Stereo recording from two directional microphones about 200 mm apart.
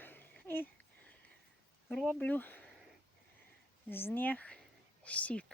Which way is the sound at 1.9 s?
5° left (ahead or behind).